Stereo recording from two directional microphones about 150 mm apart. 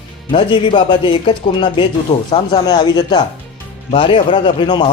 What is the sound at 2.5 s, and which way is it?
A man's voice, 25° left (ahead or behind).